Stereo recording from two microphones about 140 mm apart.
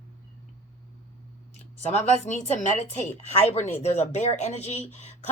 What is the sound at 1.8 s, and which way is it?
A woman's voice, 55° left (ahead or behind).